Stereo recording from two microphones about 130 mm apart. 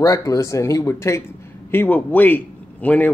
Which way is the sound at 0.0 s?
25° left (ahead or behind).